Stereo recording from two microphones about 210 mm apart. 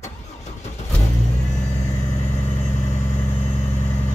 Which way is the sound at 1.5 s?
35° left (ahead or behind).